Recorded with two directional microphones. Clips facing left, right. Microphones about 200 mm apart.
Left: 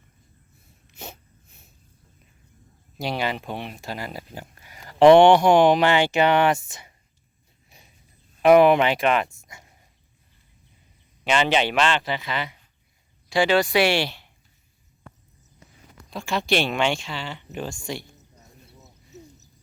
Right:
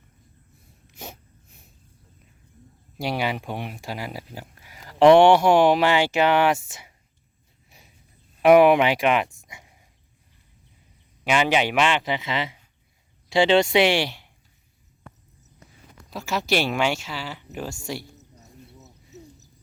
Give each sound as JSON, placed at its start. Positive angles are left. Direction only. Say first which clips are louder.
{"t": 0.9, "sound": "snort", "louder": "even", "side_deg": -10}
{"t": 3.0, "sound": "speech", "louder": "right 1 dB", "side_deg": -10}
{"t": 8.4, "sound": "speech", "louder": "even", "side_deg": -10}
{"t": 11.2, "sound": "speech", "louder": "even", "side_deg": -10}
{"t": 16.0, "sound": "speech", "louder": "left 1 dB", "side_deg": -5}